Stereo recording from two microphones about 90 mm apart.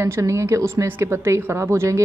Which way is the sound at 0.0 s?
30° right (ahead or behind).